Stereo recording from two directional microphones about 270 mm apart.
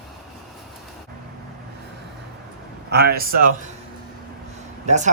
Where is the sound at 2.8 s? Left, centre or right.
Right.